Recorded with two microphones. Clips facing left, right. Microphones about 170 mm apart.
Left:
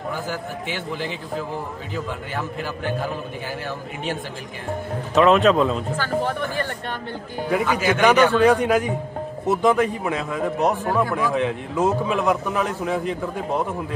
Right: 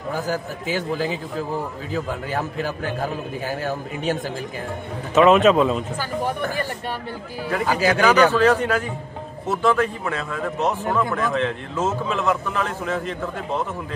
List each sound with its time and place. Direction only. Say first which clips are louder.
0.1 s a man's voice: right 6 dB; 40° right (ahead or behind)
2.0 s a man's voice: right 3 dB; 40° right (ahead or behind)
5.1 s speech: right 1 dB; 5° right (ahead or behind)
7.6 s a man's voice: right 4 dB; 40° right (ahead or behind)
8.3 s speech: left 1 dB; 10° left (ahead or behind)